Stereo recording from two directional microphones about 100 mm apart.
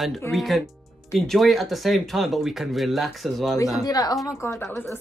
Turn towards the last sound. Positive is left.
turn(degrees=25)  # may be behind; listen again after turning